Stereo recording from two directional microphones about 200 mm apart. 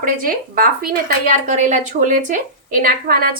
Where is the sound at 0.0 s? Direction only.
45° right (ahead or behind).